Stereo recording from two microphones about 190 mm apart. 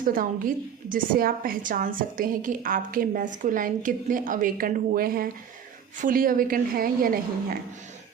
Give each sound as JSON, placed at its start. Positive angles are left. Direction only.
{"t": 0.1, "sound": "a woman's voice", "side_deg": -50}